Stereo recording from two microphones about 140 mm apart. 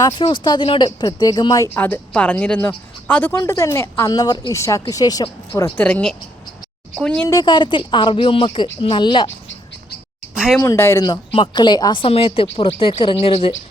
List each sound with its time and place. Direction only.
0.0 s speech: 35° left (ahead or behind)
1.8 s speech: 10° left (ahead or behind)
3.3 s speech: 25° left (ahead or behind)
5.7 s speech: 10° left (ahead or behind)
7.3 s speech: 30° left (ahead or behind)
10.3 s speech: 5° right (ahead or behind)
10.6 s speech: 20° left (ahead or behind); by 13.5 s 40° left (ahead or behind)